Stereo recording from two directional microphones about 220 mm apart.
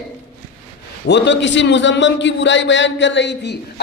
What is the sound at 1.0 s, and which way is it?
A woman's voice, 50° left (ahead or behind).